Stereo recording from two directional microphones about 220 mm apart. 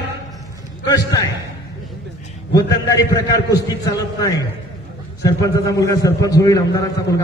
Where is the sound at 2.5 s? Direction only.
15° left (ahead or behind).